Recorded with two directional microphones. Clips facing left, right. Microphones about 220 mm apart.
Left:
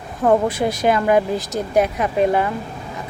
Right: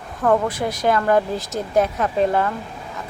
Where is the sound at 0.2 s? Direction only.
20° left (ahead or behind).